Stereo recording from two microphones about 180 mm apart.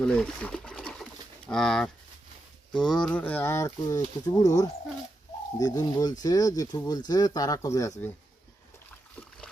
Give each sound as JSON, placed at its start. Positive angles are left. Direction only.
{"t": 0.0, "sound": "speech", "side_deg": 5}
{"t": 5.5, "sound": "speech", "side_deg": 20}